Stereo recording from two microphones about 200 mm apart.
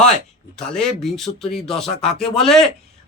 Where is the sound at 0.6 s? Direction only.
5° left (ahead or behind).